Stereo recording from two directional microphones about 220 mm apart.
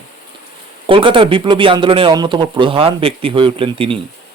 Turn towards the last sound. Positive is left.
turn(degrees=-25)  # may be behind; listen again after turning